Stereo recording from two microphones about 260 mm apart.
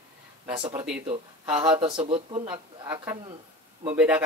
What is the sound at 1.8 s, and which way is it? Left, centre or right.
Speech, right.